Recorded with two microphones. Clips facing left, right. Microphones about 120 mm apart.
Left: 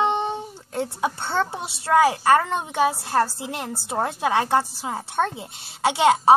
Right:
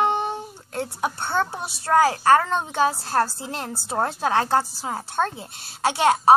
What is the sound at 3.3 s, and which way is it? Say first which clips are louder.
A woman's voice: left 1 dB; 10° left (ahead or behind).